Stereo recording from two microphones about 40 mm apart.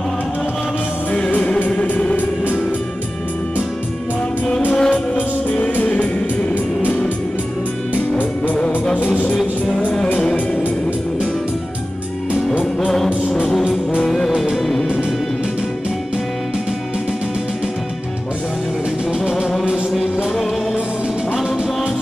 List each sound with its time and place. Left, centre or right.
4.7 s music: centre
13.3 s music: centre
14.5 s music: centre
19.1 s music: centre